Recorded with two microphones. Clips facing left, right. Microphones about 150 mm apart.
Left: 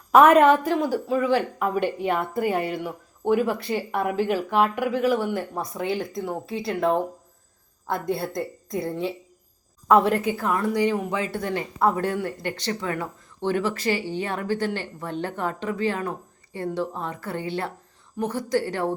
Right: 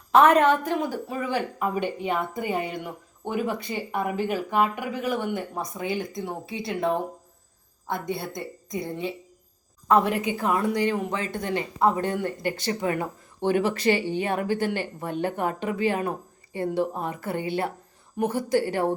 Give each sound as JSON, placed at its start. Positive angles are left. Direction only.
{"t": 0.1, "sound": "a woman's voice", "side_deg": 10}
{"t": 7.9, "sound": "speech", "side_deg": 0}
{"t": 10.7, "sound": "a woman's voice", "side_deg": 10}
{"t": 12.8, "sound": "speech", "side_deg": -15}